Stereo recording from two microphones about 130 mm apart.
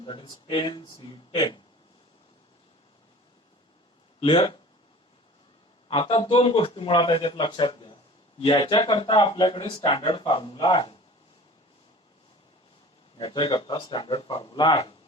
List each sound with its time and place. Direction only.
0.0 s a man's voice: 40° left (ahead or behind)
4.2 s speech: 45° left (ahead or behind)
5.9 s a man's voice: 40° left (ahead or behind)
13.1 s a man's voice: 35° left (ahead or behind)